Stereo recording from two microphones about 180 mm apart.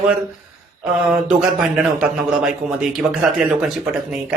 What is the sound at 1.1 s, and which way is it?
A man's voice, 5° right (ahead or behind).